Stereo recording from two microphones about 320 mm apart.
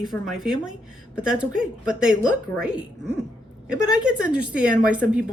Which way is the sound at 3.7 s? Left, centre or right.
Centre.